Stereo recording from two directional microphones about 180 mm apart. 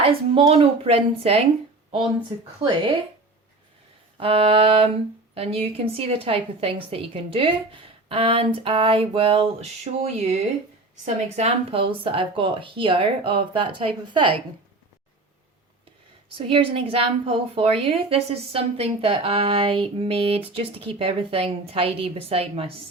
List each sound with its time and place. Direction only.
0.0 s a woman's voice: 30° right (ahead or behind)
2.6 s speech: 25° right (ahead or behind)
4.2 s a woman's voice: 30° right (ahead or behind)
16.5 s a woman's voice: 30° right (ahead or behind)